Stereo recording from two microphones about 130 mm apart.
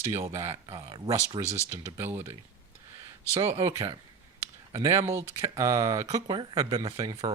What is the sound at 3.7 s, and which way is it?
Speech, 25° right (ahead or behind).